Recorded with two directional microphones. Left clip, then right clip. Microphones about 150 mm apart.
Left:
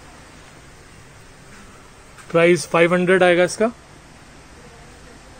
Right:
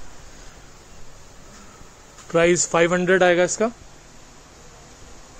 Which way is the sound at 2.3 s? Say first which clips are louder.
Left 2 dB; 15° right (ahead or behind).